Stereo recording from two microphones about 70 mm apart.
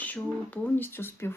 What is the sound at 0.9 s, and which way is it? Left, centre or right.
Speech, left.